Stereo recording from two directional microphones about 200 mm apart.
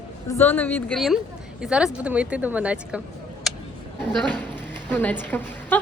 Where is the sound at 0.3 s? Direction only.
10° left (ahead or behind); by 3.0 s 5° right (ahead or behind).